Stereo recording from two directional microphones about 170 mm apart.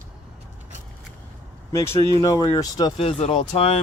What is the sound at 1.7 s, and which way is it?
Speech, 15° left (ahead or behind).